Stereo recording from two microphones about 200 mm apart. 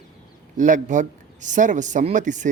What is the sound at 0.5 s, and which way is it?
A man's voice, 40° right (ahead or behind).